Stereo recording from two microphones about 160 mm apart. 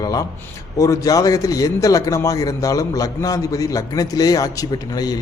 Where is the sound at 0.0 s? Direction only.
25° left (ahead or behind).